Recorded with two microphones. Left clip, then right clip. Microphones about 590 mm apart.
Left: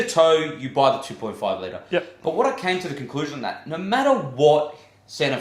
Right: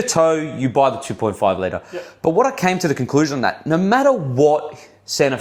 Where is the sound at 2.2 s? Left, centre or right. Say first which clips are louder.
Right 9 dB; right.